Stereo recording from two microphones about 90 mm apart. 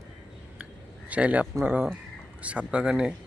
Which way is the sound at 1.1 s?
15° right (ahead or behind).